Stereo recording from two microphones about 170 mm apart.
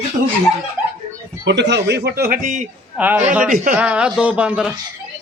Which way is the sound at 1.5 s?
90° right.